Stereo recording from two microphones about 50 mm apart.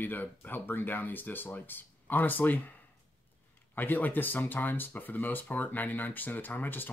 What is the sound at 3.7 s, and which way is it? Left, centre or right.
Speech, left.